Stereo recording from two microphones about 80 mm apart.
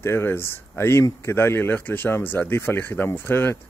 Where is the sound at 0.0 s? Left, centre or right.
Left.